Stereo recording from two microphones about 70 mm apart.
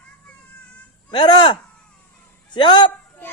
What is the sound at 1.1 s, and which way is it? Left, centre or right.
Speech, left.